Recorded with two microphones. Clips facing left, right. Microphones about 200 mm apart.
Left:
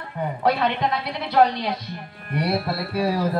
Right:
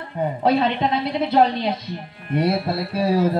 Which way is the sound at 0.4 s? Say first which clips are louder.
Right 2 dB; 25° right (ahead or behind).